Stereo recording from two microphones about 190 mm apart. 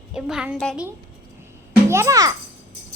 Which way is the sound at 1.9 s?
15° right (ahead or behind).